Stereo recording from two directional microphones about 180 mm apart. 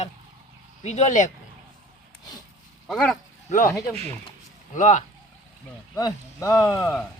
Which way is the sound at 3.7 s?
20° left (ahead or behind).